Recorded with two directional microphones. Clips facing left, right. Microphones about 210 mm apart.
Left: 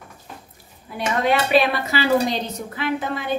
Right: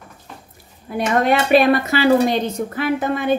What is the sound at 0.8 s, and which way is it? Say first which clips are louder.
Speech: right 4 dB; 50° right (ahead or behind).